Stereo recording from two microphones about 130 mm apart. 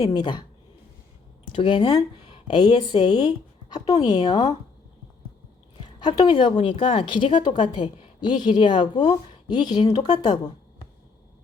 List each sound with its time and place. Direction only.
0.0 s a woman's voice: 30° left (ahead or behind)
1.5 s a woman's voice: 40° left (ahead or behind)
5.8 s a woman's voice: 30° left (ahead or behind)